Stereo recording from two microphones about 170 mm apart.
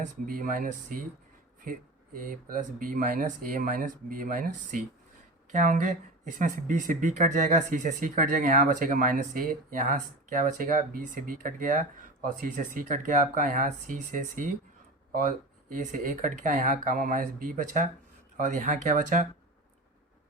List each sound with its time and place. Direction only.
0.3 s speech: 55° right (ahead or behind)
2.1 s speech: 55° right (ahead or behind)
5.5 s speech: 45° right (ahead or behind)
15.7 s speech: 50° right (ahead or behind)